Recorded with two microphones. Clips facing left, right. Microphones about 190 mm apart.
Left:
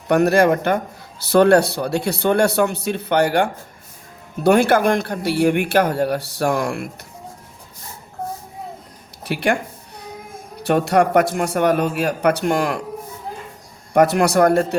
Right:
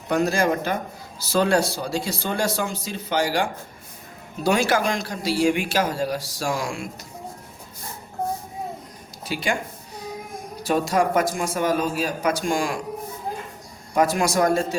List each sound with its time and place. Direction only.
0.1 s speech: 65° left (ahead or behind)
9.2 s speech: 60° left (ahead or behind)
10.6 s speech: 65° left (ahead or behind)
13.9 s speech: 65° left (ahead or behind)